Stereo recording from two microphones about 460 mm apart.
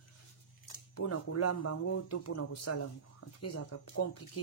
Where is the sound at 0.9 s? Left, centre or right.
Left.